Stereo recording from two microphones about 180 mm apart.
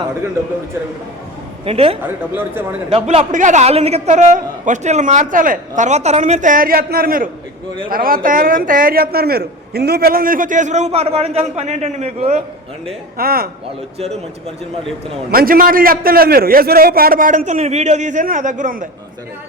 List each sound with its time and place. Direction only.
1.6 s a man's voice: 35° right (ahead or behind)
2.0 s speech: 10° right (ahead or behind)
2.9 s a man's voice: 35° right (ahead or behind)
13.1 s a man's voice: 55° right (ahead or behind)
15.3 s a man's voice: 55° right (ahead or behind)